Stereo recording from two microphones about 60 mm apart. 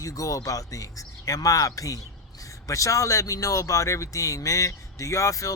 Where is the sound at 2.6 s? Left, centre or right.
Left.